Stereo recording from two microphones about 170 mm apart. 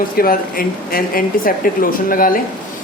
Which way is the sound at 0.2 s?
60° left (ahead or behind).